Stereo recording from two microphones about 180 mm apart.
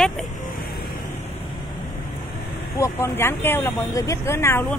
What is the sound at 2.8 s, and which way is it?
Speech, 15° left (ahead or behind).